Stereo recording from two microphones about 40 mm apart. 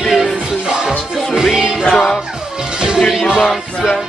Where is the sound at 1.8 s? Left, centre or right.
Centre.